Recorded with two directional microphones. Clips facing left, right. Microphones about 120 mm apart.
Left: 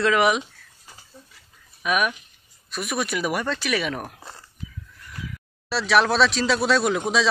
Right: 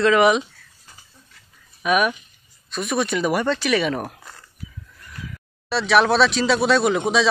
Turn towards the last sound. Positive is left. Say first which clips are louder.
# right 3 dB
turn(degrees=0)  # may be behind; listen again after turning